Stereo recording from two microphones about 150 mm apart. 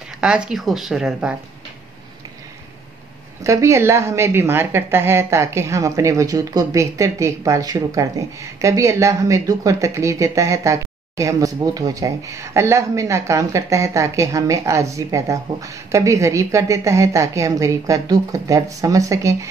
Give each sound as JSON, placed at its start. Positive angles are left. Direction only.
{"t": 0.2, "sound": "speech", "side_deg": -5}
{"t": 3.4, "sound": "a woman's voice", "side_deg": -20}